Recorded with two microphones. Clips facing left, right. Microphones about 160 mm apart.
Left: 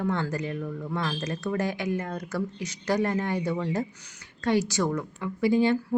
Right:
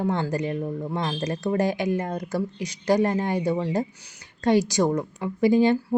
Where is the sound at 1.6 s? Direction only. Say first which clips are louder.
Right 5 dB; 15° right (ahead or behind).